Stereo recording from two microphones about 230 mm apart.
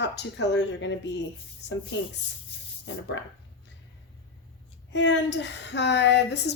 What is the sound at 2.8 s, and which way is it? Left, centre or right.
Speech, left.